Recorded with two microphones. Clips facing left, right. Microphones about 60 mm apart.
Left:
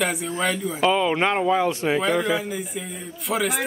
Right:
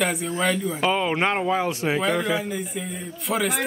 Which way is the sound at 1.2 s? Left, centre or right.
Centre.